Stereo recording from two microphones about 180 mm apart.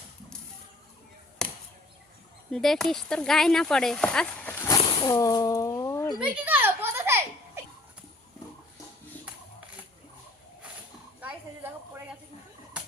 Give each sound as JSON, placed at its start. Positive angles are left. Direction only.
{"t": 2.5, "sound": "speech", "side_deg": 0}
{"t": 6.1, "sound": "children playing", "side_deg": -5}
{"t": 11.2, "sound": "a sound", "side_deg": -10}